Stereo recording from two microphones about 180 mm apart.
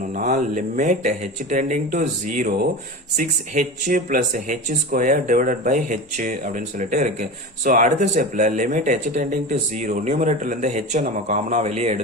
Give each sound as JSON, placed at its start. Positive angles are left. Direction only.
{"t": 0.0, "sound": "speech", "side_deg": -45}